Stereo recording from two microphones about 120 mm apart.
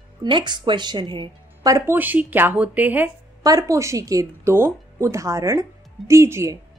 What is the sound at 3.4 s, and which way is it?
Speech, 30° right (ahead or behind).